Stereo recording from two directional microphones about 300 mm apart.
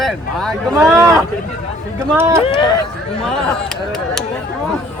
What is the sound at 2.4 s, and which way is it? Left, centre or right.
Speech, centre.